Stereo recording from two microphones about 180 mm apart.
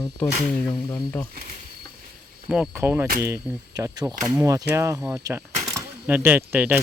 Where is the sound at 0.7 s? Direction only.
25° left (ahead or behind).